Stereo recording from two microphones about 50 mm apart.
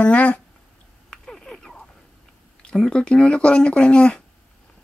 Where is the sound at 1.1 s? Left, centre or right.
Centre.